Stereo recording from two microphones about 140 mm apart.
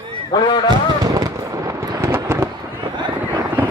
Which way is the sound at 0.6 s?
30° right (ahead or behind).